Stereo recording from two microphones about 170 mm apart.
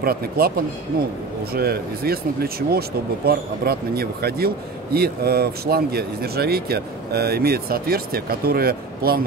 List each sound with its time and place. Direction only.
0.0 s speech: 65° right (ahead or behind)
1.5 s speech: 65° right (ahead or behind)